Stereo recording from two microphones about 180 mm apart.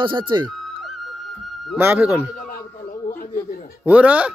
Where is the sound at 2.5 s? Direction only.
50° left (ahead or behind).